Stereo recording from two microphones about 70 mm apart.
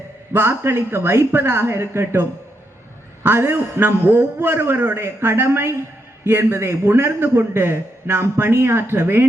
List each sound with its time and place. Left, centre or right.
0.3 s a man's voice: right
3.2 s a man's voice: right